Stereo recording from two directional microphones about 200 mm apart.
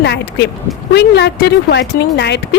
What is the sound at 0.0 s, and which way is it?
Speech, 60° left (ahead or behind).